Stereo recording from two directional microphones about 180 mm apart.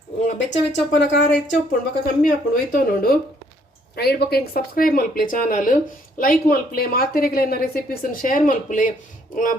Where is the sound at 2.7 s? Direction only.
50° left (ahead or behind).